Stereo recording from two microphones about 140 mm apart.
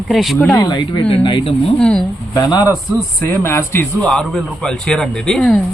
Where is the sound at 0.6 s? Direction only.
30° left (ahead or behind).